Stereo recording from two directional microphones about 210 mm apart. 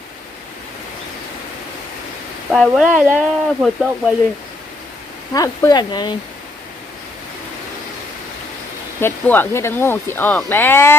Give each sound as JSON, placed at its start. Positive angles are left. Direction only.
{"t": 2.5, "sound": "speech", "side_deg": -5}
{"t": 5.3, "sound": "speech", "side_deg": 15}
{"t": 9.0, "sound": "speech", "side_deg": 10}